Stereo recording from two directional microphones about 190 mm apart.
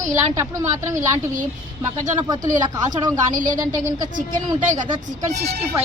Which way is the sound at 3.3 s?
45° right (ahead or behind).